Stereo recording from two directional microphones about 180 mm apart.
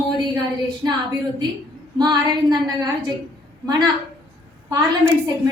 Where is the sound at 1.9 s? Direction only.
25° right (ahead or behind).